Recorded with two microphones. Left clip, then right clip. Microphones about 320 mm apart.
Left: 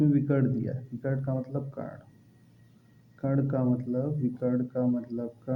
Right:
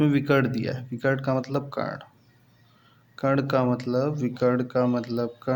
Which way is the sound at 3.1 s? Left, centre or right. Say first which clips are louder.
Right 7 dB; centre.